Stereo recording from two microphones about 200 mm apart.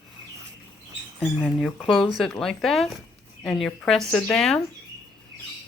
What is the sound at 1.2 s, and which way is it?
Speech, centre (ahead or behind).